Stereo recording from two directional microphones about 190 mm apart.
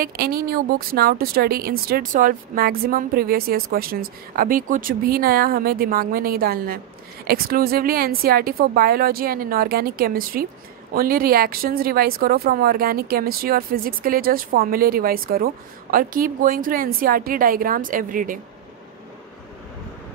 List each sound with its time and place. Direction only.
0.0 s speech: 50° right (ahead or behind)